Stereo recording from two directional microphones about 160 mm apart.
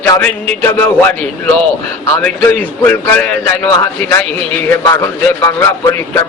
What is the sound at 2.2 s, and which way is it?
A man's voice, 10° left (ahead or behind).